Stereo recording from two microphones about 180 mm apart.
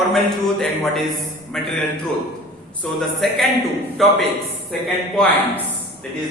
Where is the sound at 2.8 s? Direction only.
Centre (ahead or behind).